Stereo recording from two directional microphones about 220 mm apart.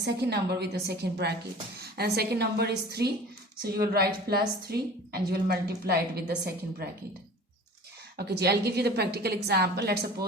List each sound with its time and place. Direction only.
0.0 s a woman's voice: 50° right (ahead or behind)
8.1 s a woman's voice: 50° right (ahead or behind)